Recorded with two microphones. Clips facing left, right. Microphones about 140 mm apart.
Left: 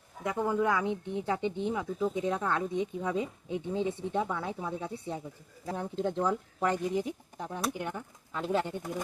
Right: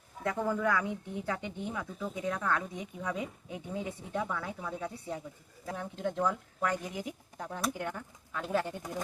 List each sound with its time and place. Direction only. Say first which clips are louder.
0.3 s speech: left 2 dB; 15° left (ahead or behind)